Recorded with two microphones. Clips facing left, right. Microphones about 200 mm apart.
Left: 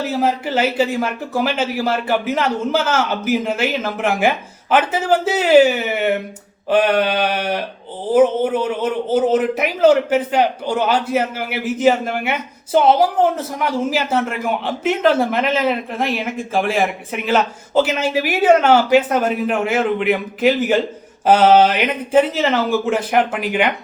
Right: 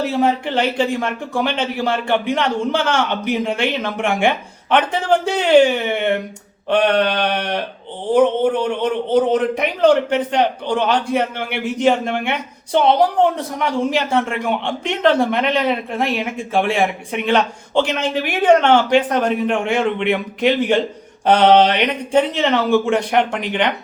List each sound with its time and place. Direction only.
0.0 s a man's voice: centre (ahead or behind)